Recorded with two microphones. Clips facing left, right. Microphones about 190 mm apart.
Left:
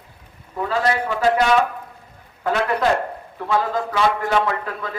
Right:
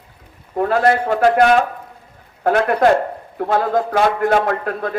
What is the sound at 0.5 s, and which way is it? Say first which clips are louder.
A man's voice: right 6 dB; 55° right (ahead or behind).